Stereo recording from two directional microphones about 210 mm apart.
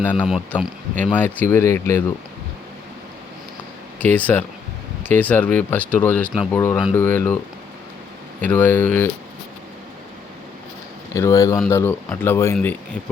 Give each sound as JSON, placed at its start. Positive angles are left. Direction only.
{"t": 0.0, "sound": "speech", "side_deg": 5}
{"t": 1.1, "sound": "speech", "side_deg": 10}
{"t": 4.0, "sound": "speech", "side_deg": 5}
{"t": 8.4, "sound": "speech", "side_deg": 10}
{"t": 11.1, "sound": "speech", "side_deg": 15}